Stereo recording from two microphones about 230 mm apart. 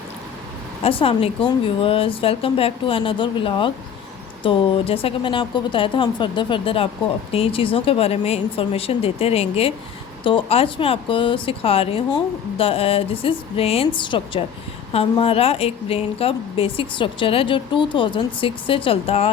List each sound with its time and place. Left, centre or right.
0.8 s a woman's voice: left